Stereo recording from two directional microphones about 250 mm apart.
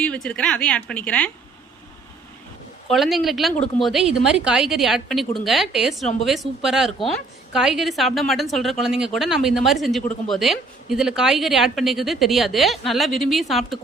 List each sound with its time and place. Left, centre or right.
0.0 s a woman's voice: centre
2.9 s a woman's voice: centre